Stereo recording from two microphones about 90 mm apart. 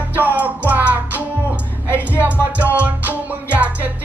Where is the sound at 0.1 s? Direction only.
20° right (ahead or behind).